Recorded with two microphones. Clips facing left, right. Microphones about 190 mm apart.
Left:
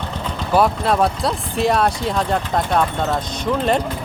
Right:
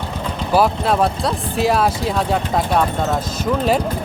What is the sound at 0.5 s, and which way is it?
Speech, centre (ahead or behind).